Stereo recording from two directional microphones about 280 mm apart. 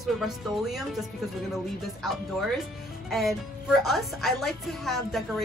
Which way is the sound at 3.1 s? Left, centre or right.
Centre.